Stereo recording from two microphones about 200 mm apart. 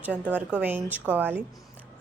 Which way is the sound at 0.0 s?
10° right (ahead or behind).